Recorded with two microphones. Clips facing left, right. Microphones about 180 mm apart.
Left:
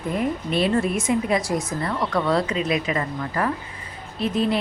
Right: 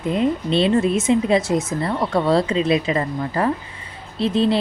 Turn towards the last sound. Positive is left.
turn(degrees=-30)  # may be behind; listen again after turning